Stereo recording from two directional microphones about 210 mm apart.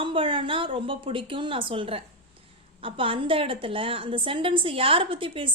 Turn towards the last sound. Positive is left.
turn(degrees=-25)  # may be behind; listen again after turning